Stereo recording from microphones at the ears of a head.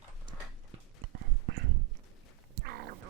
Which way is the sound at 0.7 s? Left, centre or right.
Right.